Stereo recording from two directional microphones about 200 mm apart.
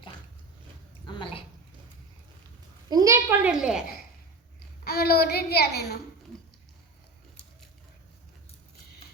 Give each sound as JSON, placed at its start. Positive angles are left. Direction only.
{"t": 1.0, "sound": "a sound", "side_deg": 25}
{"t": 2.9, "sound": "a woman's voice", "side_deg": -15}
{"t": 4.8, "sound": "a child's voice", "side_deg": 50}